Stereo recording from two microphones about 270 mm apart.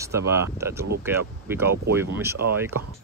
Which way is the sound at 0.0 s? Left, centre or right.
Centre.